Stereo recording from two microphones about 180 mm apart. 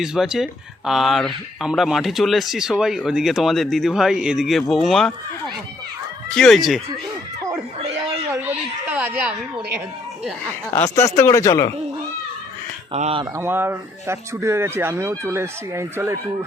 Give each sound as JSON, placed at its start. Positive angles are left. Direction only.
{"t": 0.0, "sound": "speech", "side_deg": 0}
{"t": 6.3, "sound": "speech", "side_deg": 0}
{"t": 8.1, "sound": "a sound", "side_deg": -10}
{"t": 10.8, "sound": "speech", "side_deg": 15}
{"t": 12.9, "sound": "speech", "side_deg": -35}
{"t": 13.3, "sound": "speech", "side_deg": -10}